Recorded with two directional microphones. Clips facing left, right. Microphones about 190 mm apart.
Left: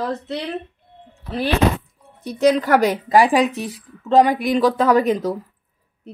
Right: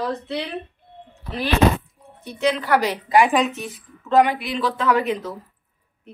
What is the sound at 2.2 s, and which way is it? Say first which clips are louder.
Speech: left 5 dB; 40° left (ahead or behind).